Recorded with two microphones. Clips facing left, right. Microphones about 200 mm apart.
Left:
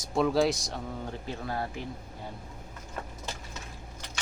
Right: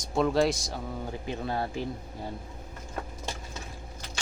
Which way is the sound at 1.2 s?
20° right (ahead or behind).